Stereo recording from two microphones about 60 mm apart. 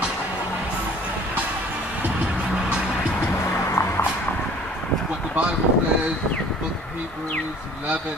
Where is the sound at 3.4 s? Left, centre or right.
Left.